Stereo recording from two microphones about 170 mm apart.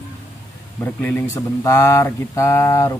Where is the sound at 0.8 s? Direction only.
10° left (ahead or behind).